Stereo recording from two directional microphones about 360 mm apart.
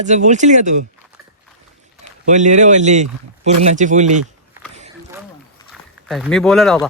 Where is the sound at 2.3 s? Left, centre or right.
Centre.